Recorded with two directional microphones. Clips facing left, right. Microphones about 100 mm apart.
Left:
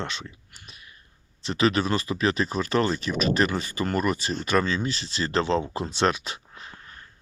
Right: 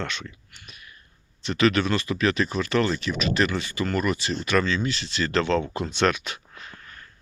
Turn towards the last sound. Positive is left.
turn(degrees=30)  # may be behind; listen again after turning